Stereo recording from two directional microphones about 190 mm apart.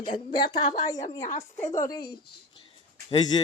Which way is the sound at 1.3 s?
35° left (ahead or behind).